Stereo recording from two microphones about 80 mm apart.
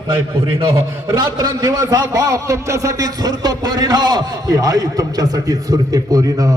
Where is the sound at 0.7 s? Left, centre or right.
Right.